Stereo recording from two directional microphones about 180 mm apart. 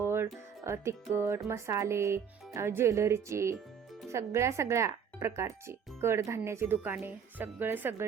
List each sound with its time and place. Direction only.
0.0 s music: 15° right (ahead or behind)
1.1 s speech: 15° right (ahead or behind)